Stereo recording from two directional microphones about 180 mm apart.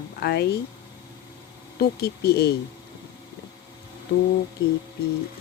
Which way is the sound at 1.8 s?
60° left (ahead or behind).